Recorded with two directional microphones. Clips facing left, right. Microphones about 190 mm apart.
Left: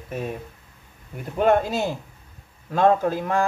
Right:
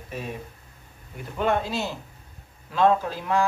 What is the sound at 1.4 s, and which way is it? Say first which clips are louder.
Speech: left 5 dB; 50° left (ahead or behind).